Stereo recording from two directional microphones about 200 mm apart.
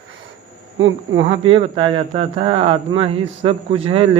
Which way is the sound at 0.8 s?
70° right (ahead or behind).